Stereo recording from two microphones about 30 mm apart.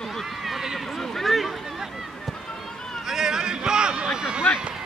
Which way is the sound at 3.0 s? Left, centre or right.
Centre.